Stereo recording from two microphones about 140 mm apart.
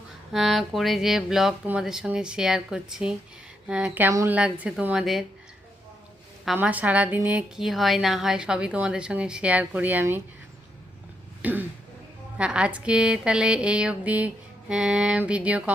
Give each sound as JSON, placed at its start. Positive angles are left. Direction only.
{"t": 0.3, "sound": "a woman's voice", "side_deg": 0}
{"t": 4.1, "sound": "a woman's voice", "side_deg": -20}
{"t": 4.4, "sound": "a woman's voice", "side_deg": -10}
{"t": 6.6, "sound": "a woman's voice", "side_deg": -10}
{"t": 11.4, "sound": "a woman's voice", "side_deg": -10}